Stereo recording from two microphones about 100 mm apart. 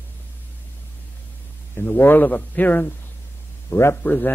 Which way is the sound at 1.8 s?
20° left (ahead or behind).